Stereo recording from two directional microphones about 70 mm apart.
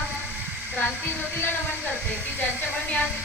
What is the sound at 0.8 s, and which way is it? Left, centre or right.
Speech, left.